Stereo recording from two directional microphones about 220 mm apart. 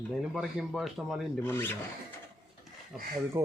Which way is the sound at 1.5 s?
10° left (ahead or behind).